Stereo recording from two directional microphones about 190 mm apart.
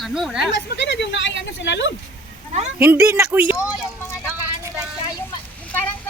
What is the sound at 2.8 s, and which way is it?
Speech, 15° right (ahead or behind).